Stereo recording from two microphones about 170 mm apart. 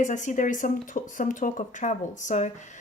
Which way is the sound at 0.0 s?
45° left (ahead or behind).